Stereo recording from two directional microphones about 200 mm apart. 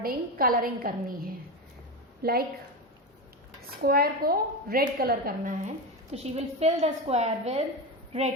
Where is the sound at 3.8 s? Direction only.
50° right (ahead or behind).